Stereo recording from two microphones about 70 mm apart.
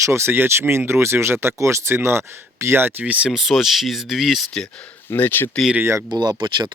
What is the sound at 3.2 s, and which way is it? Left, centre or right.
Speech, centre.